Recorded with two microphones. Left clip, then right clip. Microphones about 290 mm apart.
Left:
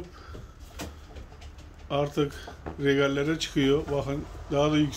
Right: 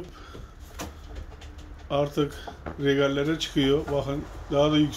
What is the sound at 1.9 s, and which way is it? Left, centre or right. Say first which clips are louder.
Speech: right 2 dB; centre.